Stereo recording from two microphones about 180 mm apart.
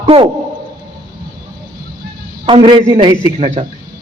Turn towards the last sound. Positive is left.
turn(degrees=-25)  # may be behind; listen again after turning